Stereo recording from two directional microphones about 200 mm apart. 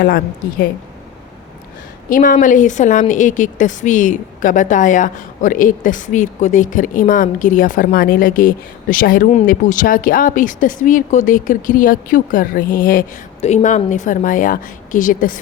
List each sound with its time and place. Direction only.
2.0 s a woman's voice: 45° left (ahead or behind)